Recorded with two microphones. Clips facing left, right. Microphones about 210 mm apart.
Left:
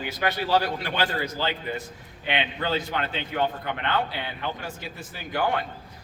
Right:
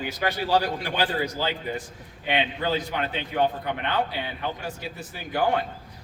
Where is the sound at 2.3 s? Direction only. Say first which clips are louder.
Right 2 dB; 15° right (ahead or behind).